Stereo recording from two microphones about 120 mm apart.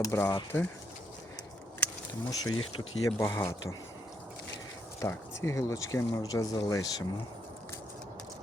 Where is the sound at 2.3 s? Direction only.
30° left (ahead or behind).